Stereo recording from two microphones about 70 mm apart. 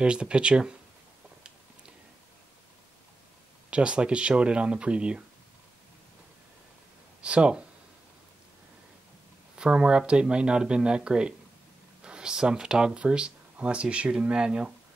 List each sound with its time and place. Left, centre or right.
0.0 s speech: centre
3.7 s speech: centre
7.2 s speech: centre
9.6 s speech: centre